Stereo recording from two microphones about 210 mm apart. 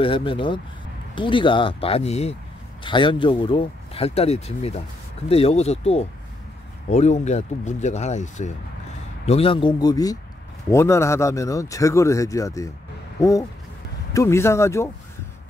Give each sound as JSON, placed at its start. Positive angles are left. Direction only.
{"t": 0.0, "sound": "speech", "side_deg": 25}